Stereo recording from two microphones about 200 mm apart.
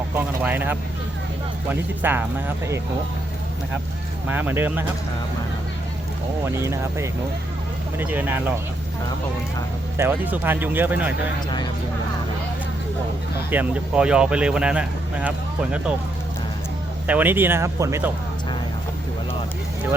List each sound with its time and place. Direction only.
0.1 s speech: 10° right (ahead or behind)
4.3 s speech: 10° right (ahead or behind)
6.4 s speech: 15° right (ahead or behind)
10.0 s speech: 10° right (ahead or behind)
13.5 s speech: 5° right (ahead or behind)
17.1 s speech: 10° right (ahead or behind)